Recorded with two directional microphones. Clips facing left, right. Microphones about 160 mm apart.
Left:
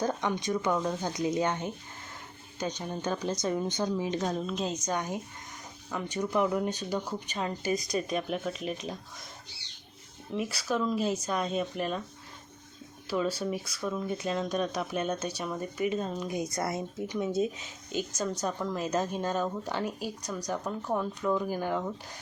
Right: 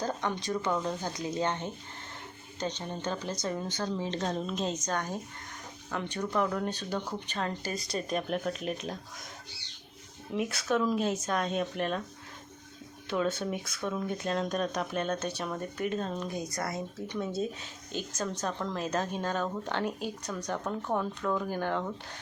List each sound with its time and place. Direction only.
0.0 s speech: 15° left (ahead or behind)
4.9 s speech: 15° left (ahead or behind)
7.9 s speech: centre (ahead or behind)
10.3 s speech: centre (ahead or behind)
13.1 s speech: 5° left (ahead or behind)
16.4 s speech: 25° left (ahead or behind)
17.9 s speech: 10° left (ahead or behind)